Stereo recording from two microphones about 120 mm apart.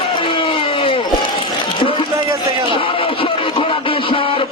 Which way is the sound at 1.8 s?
45° left (ahead or behind).